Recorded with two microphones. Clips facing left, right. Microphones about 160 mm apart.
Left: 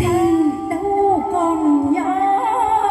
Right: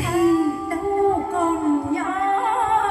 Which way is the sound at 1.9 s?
30° left (ahead or behind).